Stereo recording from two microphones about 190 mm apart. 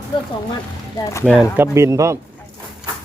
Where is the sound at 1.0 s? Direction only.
10° left (ahead or behind).